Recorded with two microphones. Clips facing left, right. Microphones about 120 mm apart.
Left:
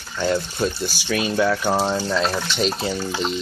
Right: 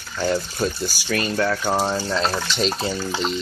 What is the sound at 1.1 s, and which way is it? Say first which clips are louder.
Speech: left 2 dB; 5° left (ahead or behind).